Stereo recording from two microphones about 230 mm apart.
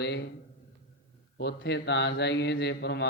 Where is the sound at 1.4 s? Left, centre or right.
Left.